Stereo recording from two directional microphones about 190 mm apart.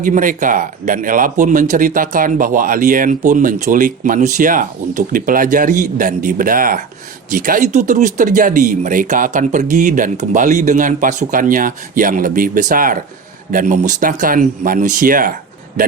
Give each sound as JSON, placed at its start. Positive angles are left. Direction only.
{"t": 0.0, "sound": "speech", "side_deg": -45}